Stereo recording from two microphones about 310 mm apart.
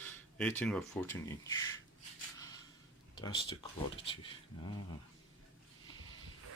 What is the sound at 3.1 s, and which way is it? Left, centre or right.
Speech, centre.